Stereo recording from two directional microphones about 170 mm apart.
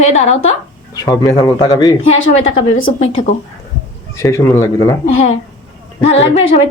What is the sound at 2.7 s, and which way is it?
Speech, 50° left (ahead or behind).